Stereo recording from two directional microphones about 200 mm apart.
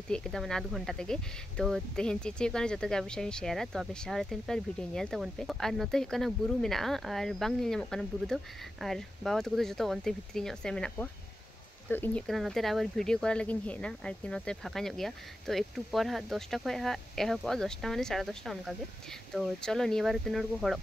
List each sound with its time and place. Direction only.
0.1 s speech: 5° left (ahead or behind)